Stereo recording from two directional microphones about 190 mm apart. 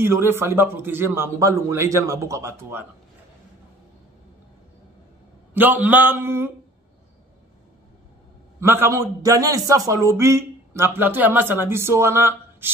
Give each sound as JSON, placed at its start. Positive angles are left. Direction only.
{"t": 0.0, "sound": "a man's voice", "side_deg": -10}
{"t": 5.5, "sound": "a man's voice", "side_deg": -10}
{"t": 8.5, "sound": "a man's voice", "side_deg": -15}